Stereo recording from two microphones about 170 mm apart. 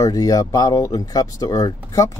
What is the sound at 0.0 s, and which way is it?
Speech, 20° left (ahead or behind).